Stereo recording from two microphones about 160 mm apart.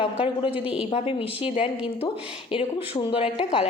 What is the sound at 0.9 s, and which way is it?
Speech, 35° left (ahead or behind).